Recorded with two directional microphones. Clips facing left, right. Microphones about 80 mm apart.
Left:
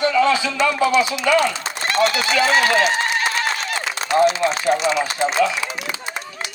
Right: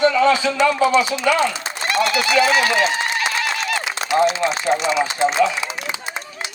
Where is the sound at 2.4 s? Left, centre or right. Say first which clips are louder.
Left 1 dB; left.